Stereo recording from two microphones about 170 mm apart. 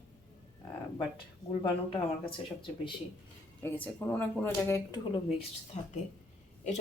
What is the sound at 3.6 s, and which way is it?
Speech, 10° left (ahead or behind).